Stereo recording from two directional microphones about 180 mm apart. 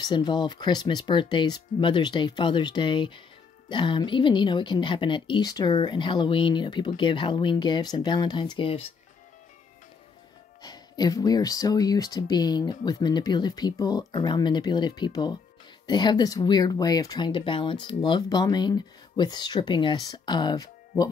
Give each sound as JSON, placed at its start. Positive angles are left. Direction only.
{"t": 0.0, "sound": "a woman's voice", "side_deg": 25}
{"t": 10.6, "sound": "a woman's voice", "side_deg": 20}